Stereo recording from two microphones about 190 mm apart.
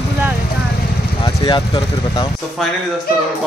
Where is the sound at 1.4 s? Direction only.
30° left (ahead or behind).